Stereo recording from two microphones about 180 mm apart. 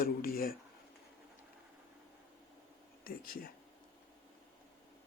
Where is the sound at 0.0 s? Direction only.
55° left (ahead or behind).